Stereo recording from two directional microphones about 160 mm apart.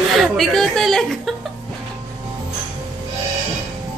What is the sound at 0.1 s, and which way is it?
A woman's voice, centre (ahead or behind).